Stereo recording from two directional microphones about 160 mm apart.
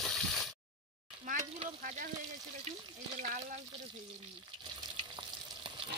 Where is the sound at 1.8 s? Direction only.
55° right (ahead or behind).